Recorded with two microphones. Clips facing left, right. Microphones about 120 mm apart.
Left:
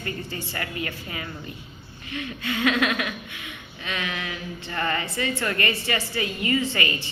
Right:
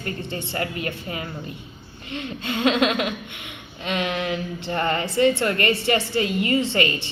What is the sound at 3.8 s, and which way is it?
A woman's voice, 35° right (ahead or behind).